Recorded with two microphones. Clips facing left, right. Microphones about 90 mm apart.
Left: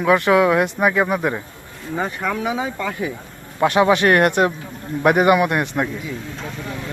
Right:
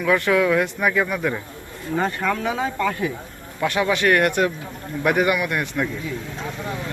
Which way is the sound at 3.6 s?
30° left (ahead or behind).